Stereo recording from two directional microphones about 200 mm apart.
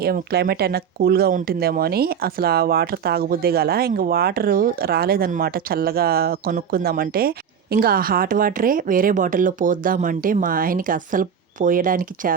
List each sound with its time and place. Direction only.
0.0 s speech: 50° right (ahead or behind)